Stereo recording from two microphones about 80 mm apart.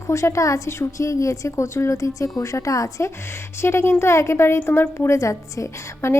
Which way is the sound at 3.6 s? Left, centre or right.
Left.